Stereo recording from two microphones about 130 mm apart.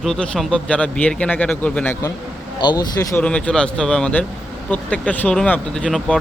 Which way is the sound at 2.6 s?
30° left (ahead or behind).